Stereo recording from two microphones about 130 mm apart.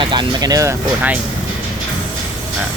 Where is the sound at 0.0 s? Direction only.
35° right (ahead or behind).